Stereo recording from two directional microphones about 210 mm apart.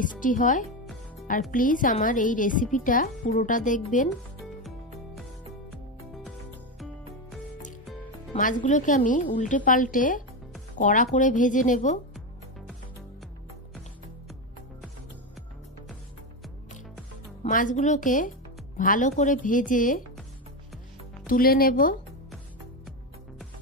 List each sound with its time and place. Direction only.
0.0 s a woman's voice: 40° left (ahead or behind)
8.3 s a woman's voice: 40° left (ahead or behind)
17.4 s a woman's voice: 40° left (ahead or behind)
21.3 s speech: 45° left (ahead or behind)